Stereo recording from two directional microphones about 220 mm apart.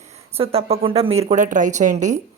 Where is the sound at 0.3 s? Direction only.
25° right (ahead or behind).